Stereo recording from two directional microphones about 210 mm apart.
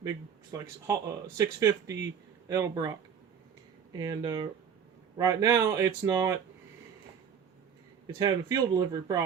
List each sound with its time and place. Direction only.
0.5 s speech: 15° right (ahead or behind)
3.9 s speech: 20° right (ahead or behind)
8.0 s speech: 20° right (ahead or behind)